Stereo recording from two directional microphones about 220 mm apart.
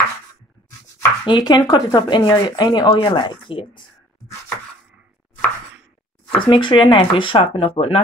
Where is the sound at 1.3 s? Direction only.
20° left (ahead or behind).